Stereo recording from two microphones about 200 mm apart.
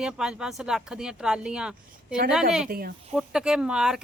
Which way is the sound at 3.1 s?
5° right (ahead or behind).